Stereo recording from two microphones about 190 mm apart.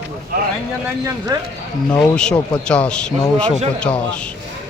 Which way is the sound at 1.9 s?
5° left (ahead or behind).